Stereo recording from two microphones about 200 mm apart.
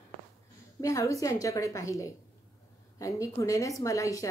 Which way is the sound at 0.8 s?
15° left (ahead or behind).